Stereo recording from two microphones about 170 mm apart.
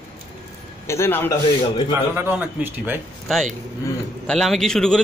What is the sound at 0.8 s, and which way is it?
Speech, 15° left (ahead or behind).